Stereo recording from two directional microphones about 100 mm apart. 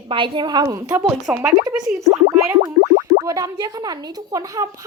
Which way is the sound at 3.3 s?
35° right (ahead or behind).